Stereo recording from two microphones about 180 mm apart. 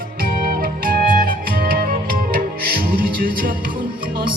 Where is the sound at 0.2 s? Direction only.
50° right (ahead or behind).